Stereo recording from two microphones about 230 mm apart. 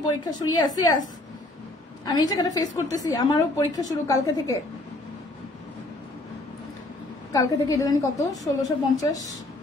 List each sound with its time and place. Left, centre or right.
0.2 s a woman's voice: centre
2.0 s a woman's voice: centre
7.3 s a woman's voice: centre